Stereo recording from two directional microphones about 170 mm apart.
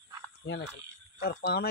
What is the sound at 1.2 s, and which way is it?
Speech, 70° left (ahead or behind).